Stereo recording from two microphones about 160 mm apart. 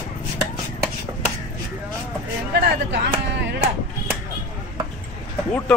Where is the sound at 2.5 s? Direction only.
90° right.